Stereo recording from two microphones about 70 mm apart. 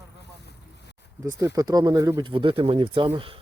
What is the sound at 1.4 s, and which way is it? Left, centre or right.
Speech, right.